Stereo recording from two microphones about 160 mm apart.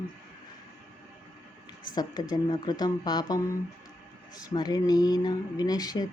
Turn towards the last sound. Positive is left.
turn(degrees=25)  # may be behind; listen again after turning